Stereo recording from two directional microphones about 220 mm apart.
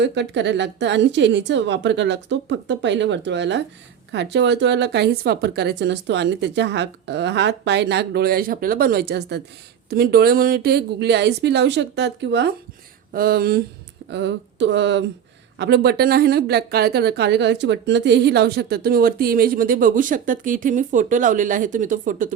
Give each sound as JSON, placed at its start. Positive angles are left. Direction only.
{"t": 0.0, "sound": "speech", "side_deg": -55}